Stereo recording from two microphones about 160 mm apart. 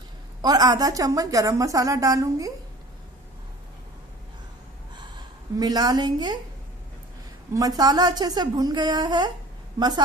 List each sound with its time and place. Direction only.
0.4 s a woman's voice: 25° right (ahead or behind)
5.6 s a woman's voice: 25° right (ahead or behind)
7.5 s a woman's voice: 25° right (ahead or behind)